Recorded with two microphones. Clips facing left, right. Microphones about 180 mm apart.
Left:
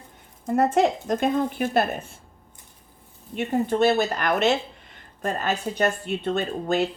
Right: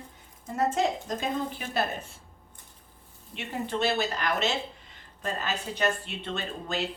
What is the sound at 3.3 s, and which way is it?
Speech, 45° left (ahead or behind).